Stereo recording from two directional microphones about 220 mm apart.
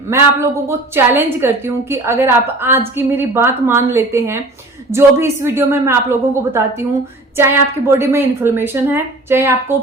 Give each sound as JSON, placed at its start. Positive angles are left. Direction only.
{"t": 0.1, "sound": "a woman's voice", "side_deg": -10}